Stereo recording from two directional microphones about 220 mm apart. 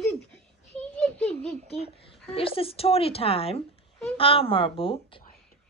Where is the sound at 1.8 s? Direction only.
25° left (ahead or behind).